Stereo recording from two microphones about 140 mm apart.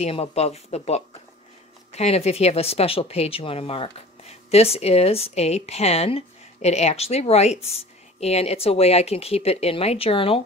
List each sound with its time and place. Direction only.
0.0 s a woman's voice: 45° left (ahead or behind)